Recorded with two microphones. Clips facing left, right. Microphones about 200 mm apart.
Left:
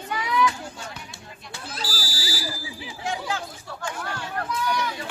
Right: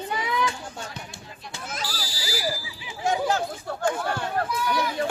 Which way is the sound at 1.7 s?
30° left (ahead or behind).